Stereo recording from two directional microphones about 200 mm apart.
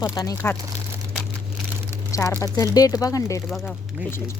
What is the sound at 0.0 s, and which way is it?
Speech, 15° left (ahead or behind).